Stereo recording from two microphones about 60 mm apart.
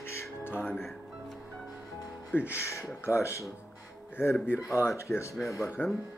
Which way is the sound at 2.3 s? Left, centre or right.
Left.